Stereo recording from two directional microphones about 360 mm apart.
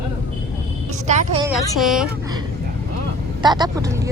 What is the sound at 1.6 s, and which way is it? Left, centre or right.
Speech, centre.